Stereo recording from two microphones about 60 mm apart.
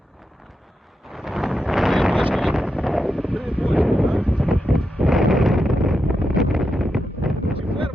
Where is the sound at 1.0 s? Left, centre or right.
Centre.